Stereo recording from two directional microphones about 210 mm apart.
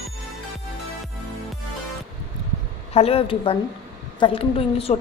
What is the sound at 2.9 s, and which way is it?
A woman's voice, 30° left (ahead or behind).